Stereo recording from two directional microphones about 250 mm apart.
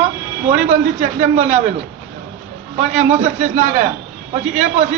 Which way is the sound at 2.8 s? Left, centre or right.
Right.